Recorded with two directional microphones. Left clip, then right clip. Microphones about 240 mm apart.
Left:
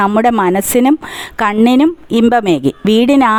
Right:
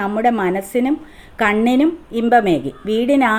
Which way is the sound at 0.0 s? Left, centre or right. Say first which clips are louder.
Left 6 dB; left.